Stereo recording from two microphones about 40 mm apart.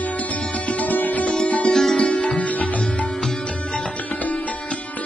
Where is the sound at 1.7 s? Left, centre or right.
Centre.